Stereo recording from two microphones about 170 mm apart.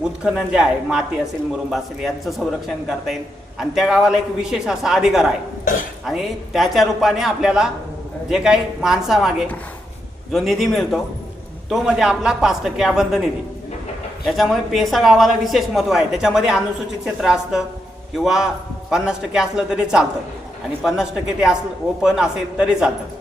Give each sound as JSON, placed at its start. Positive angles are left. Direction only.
{"t": 0.0, "sound": "speech", "side_deg": -5}
{"t": 14.3, "sound": "speech", "side_deg": 0}